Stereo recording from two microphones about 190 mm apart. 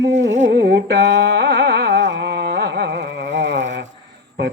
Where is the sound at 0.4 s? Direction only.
65° right (ahead or behind).